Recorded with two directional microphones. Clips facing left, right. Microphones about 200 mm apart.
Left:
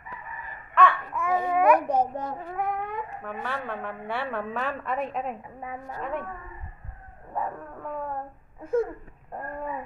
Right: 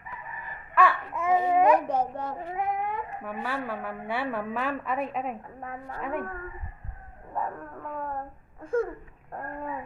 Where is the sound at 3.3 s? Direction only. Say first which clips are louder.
Right 2 dB; 5° right (ahead or behind).